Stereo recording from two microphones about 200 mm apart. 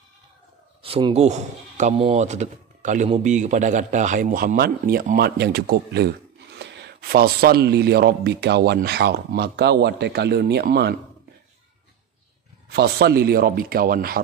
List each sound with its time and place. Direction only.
0.8 s speech: 30° right (ahead or behind); by 11.0 s 55° right (ahead or behind)
12.6 s a man's voice: 55° right (ahead or behind)